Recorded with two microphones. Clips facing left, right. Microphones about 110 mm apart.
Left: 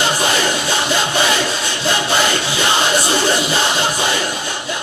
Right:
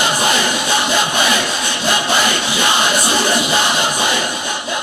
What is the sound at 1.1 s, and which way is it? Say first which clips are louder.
Crowd: even; 15° right (ahead or behind).